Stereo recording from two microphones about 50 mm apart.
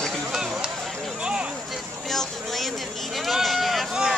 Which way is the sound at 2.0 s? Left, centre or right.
Centre.